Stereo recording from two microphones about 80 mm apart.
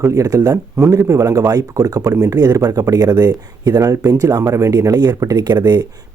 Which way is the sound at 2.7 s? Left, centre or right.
Right.